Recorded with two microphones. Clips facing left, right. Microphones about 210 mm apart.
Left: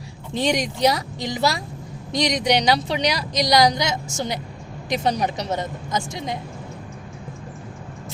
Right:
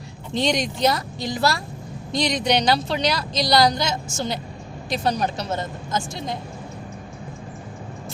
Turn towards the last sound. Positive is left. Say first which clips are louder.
# left 1 dB
turn(degrees=15)  # may be behind; listen again after turning